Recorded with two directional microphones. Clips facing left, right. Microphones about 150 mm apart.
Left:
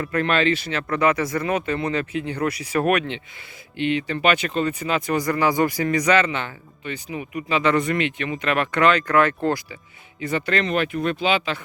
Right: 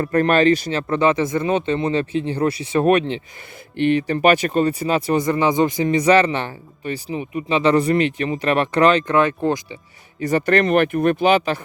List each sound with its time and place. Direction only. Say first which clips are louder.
0.0 s speech: right 5 dB; 40° right (ahead or behind)
4.0 s speech: right 5 dB; 40° right (ahead or behind); by 9.7 s 20° right (ahead or behind)
10.2 s speech: right 6 dB; 40° right (ahead or behind)